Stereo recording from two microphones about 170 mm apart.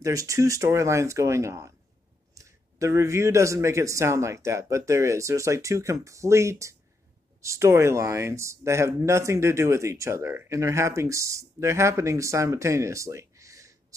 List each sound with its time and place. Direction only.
0.0 s speech: 20° right (ahead or behind)